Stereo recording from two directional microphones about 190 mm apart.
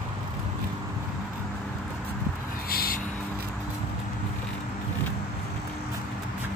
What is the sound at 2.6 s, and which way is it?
Vehicle, 50° left (ahead or behind).